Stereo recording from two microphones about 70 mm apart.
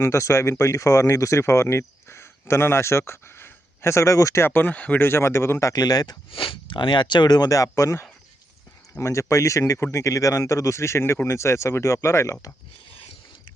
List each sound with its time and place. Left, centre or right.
0.0 s speech: left
4.4 s speech: left
5.0 s speech: left
5.7 s speech: left
6.7 s speech: left